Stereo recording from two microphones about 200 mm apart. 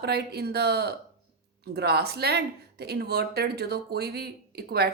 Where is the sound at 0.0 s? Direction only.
55° right (ahead or behind).